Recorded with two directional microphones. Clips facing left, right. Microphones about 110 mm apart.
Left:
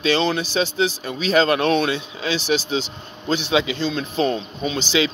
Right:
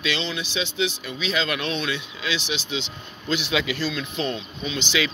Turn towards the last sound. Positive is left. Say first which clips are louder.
# left 5 dB
turn(degrees=35)  # may be behind; listen again after turning